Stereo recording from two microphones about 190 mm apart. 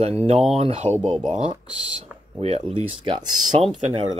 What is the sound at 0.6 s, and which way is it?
Speech, 30° right (ahead or behind).